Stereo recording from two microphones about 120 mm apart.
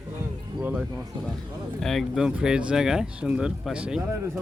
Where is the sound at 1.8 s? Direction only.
Centre (ahead or behind).